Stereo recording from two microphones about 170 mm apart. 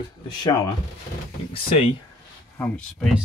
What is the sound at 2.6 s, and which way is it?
Speech, 5° left (ahead or behind).